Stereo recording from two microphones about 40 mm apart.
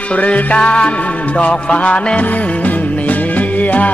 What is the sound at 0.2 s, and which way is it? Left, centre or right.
Music, left.